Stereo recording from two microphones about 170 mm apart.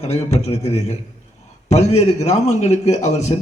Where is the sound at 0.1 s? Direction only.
40° left (ahead or behind).